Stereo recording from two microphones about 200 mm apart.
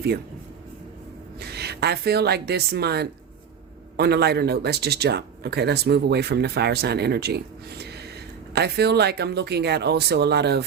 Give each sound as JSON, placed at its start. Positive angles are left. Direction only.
{"t": 1.4, "sound": "a man's voice", "side_deg": -55}